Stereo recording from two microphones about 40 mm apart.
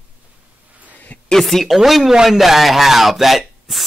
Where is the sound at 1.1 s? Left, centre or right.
Left.